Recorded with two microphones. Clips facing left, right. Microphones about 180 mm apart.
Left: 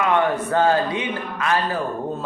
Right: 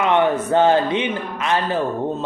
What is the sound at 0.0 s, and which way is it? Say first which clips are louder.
A man's voice: right 2 dB; 25° right (ahead or behind).